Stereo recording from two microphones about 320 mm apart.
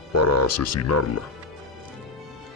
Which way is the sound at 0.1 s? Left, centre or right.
Left.